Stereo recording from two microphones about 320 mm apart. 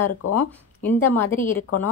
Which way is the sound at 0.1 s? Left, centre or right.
Left.